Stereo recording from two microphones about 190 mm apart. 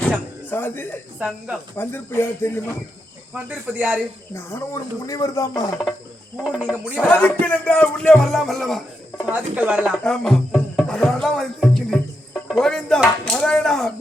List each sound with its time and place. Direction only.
0.5 s speech: 10° left (ahead or behind)
3.3 s cricket: 10° right (ahead or behind)
4.4 s speech: 15° left (ahead or behind)
6.3 s speech: centre (ahead or behind)
9.3 s cricket: 10° right (ahead or behind)
10.0 s music: 5° left (ahead or behind)